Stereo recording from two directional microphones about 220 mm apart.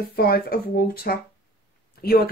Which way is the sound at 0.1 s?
45° left (ahead or behind).